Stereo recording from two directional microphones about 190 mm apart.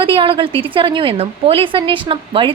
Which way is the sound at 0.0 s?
25° right (ahead or behind).